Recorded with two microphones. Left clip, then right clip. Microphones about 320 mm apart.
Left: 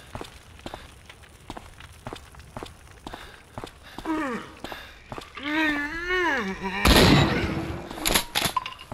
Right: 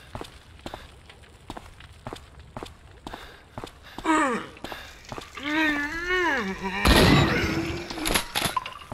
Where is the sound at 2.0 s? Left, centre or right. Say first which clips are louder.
Even; centre.